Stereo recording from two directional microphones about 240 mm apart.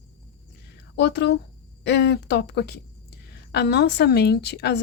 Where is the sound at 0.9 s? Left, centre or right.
Left.